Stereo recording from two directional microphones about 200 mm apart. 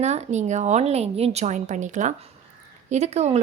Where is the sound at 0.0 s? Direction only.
35° right (ahead or behind).